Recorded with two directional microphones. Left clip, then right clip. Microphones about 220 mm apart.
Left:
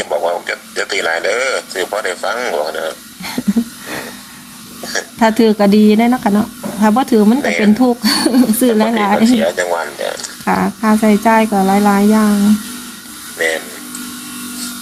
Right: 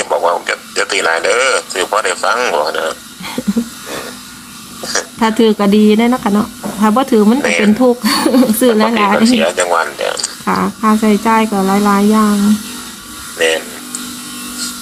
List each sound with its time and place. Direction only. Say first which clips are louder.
0.1 s a man's voice: right 4 dB; 20° right (ahead or behind)
5.2 s speech: left 1 dB; 10° left (ahead or behind)
7.4 s a man's voice: right 2 dB; 20° right (ahead or behind)
7.8 s speech: right 2 dB; 10° left (ahead or behind)
9.2 s speech: right 2 dB; 15° right (ahead or behind)
10.4 s speech: right 1 dB; 10° left (ahead or behind)